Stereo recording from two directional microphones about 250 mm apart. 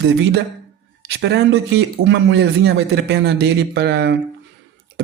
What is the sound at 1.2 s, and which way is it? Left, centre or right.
A man's voice, right.